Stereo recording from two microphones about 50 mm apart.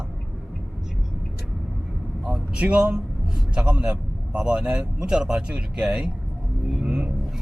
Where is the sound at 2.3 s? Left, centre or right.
Right.